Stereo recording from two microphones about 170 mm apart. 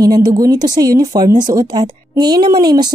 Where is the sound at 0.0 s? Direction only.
20° right (ahead or behind).